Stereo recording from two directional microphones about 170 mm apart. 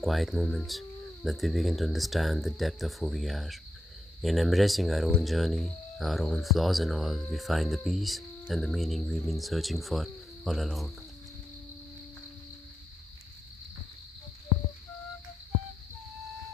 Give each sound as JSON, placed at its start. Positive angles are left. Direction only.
{"t": 0.0, "sound": "speech", "side_deg": 0}